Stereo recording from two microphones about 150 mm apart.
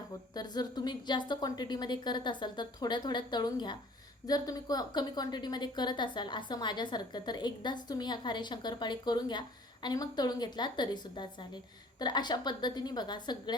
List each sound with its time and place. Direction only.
0.3 s a woman's voice: 25° left (ahead or behind)